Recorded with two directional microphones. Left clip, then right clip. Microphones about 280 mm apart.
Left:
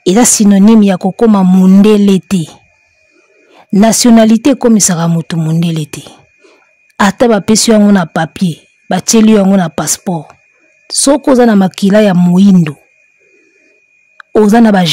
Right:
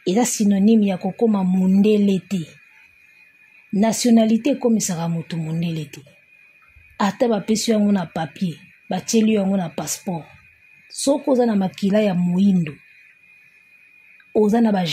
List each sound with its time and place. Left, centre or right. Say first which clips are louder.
0.0 s speech: left 11 dB; left
3.8 s speech: left 11 dB; left
14.3 s speech: left 11 dB; left